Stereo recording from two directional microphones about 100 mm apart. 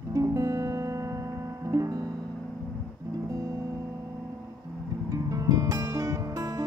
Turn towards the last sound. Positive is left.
turn(degrees=-35)  # may be behind; listen again after turning